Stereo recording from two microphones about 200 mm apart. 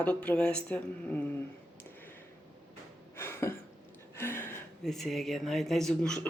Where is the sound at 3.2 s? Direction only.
10° left (ahead or behind).